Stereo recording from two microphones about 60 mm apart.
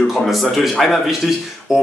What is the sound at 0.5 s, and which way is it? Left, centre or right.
Speech, centre.